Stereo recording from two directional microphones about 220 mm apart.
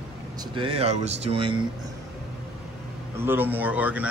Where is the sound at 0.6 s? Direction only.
25° right (ahead or behind).